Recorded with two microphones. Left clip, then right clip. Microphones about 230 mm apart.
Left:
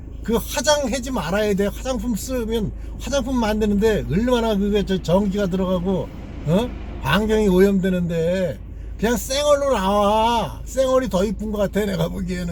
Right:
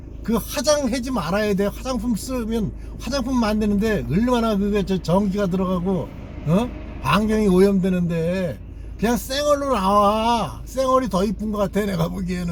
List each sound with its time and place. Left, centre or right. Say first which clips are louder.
0.3 s a man's voice: left 1 dB; centre